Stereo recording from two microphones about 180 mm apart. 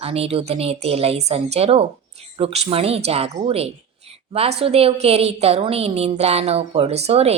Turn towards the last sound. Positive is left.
turn(degrees=-35)  # may be behind; listen again after turning